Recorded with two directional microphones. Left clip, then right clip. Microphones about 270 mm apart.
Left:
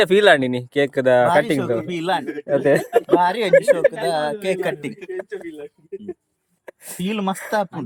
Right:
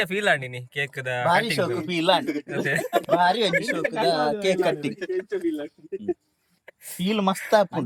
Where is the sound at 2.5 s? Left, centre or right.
Left.